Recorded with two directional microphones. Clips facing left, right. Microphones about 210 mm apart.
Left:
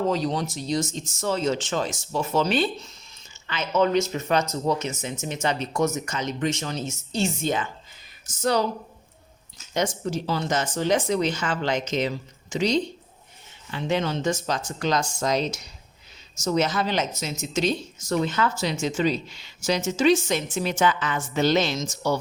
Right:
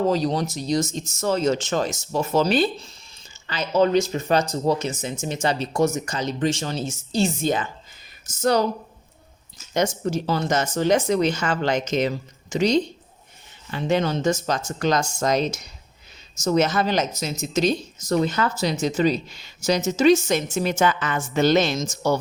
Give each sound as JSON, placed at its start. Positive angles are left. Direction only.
{"t": 0.1, "sound": "speech", "side_deg": -35}
{"t": 9.7, "sound": "speech", "side_deg": -45}